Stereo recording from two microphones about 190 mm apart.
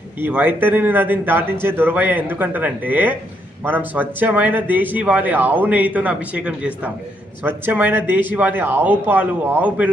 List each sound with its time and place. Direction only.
0.2 s speech: 10° right (ahead or behind)